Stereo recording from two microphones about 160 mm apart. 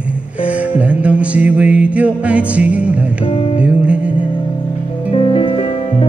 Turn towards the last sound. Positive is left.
turn(degrees=35)  # may be behind; listen again after turning